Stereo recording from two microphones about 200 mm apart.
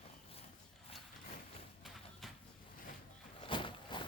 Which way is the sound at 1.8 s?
Centre (ahead or behind).